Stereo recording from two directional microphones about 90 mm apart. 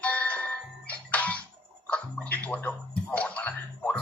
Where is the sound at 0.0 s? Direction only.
15° left (ahead or behind).